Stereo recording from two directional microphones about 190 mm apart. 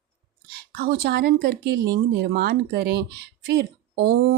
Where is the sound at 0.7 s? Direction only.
55° right (ahead or behind).